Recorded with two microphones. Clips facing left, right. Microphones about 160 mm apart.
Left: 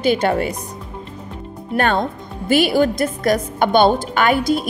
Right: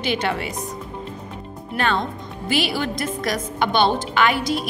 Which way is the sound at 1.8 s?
50° left (ahead or behind).